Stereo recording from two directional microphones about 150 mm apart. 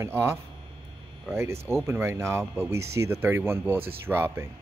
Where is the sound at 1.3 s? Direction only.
15° right (ahead or behind).